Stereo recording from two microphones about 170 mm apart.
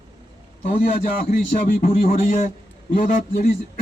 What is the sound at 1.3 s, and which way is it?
A man's voice, 55° left (ahead or behind).